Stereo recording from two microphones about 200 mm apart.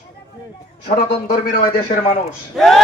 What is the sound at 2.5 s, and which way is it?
Speech, centre (ahead or behind).